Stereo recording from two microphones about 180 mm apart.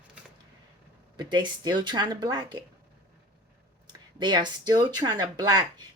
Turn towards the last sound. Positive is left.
turn(degrees=-20)  # may be behind; listen again after turning